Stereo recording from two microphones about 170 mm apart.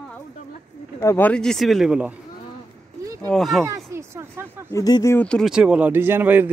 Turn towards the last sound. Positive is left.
turn(degrees=-10)  # may be behind; listen again after turning